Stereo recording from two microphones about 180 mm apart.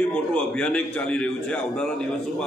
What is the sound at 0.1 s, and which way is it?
A man's voice, 5° left (ahead or behind).